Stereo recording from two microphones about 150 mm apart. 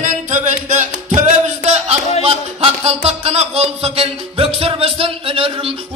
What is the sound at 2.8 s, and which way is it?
Music, 45° right (ahead or behind).